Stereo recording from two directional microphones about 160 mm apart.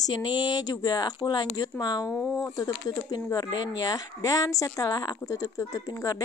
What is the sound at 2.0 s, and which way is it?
Speech, centre (ahead or behind).